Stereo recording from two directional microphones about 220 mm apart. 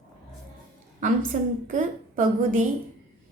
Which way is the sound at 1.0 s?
35° right (ahead or behind).